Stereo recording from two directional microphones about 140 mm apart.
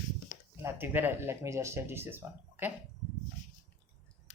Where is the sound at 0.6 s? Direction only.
15° right (ahead or behind).